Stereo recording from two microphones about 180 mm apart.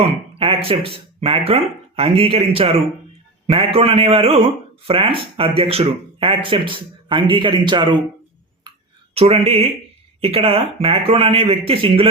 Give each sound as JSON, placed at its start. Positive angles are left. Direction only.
{"t": 0.0, "sound": "a man's voice", "side_deg": -30}
{"t": 9.1, "sound": "a man's voice", "side_deg": -30}